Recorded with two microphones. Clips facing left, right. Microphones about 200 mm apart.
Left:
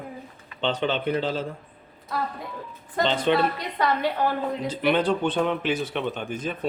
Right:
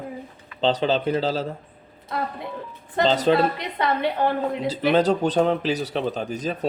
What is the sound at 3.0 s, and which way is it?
Speech, 35° right (ahead or behind).